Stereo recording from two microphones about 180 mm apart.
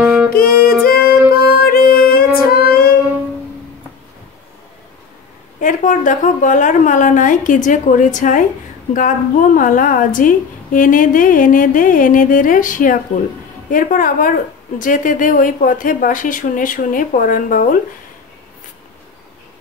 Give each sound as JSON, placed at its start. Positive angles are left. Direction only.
{"t": 0.0, "sound": "music", "side_deg": -5}
{"t": 0.8, "sound": "music", "side_deg": 55}
{"t": 5.6, "sound": "a woman's voice", "side_deg": 45}